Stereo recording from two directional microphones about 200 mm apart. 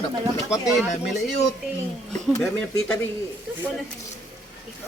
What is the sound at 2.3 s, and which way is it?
Speech, 15° left (ahead or behind).